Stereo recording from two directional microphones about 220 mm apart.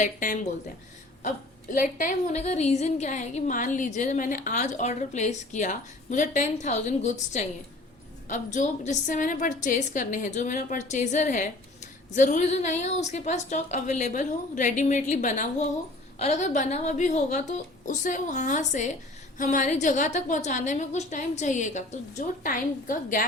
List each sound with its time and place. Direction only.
0.0 s a woman's voice: 35° left (ahead or behind)
1.7 s a woman's voice: 35° left (ahead or behind)